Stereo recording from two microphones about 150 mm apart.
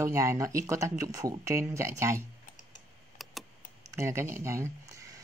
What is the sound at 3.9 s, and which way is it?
Speech, 15° right (ahead or behind).